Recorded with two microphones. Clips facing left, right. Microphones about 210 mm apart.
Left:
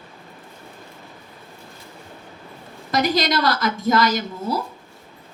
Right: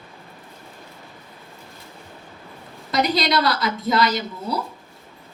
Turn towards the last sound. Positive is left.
turn(degrees=45)  # may be behind; listen again after turning